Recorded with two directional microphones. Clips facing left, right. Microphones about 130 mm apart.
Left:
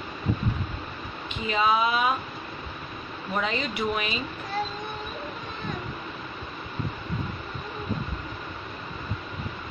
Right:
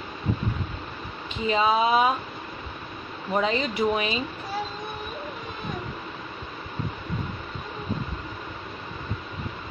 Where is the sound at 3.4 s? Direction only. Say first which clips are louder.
Right 4 dB; 35° right (ahead or behind).